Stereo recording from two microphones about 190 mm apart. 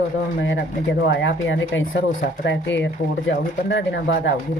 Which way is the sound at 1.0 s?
70° left (ahead or behind).